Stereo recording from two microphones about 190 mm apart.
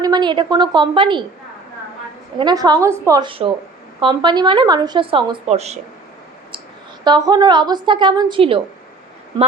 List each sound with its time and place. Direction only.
0.0 s speech: 20° right (ahead or behind)
2.4 s speech: 20° right (ahead or behind)
7.0 s speech: 20° right (ahead or behind)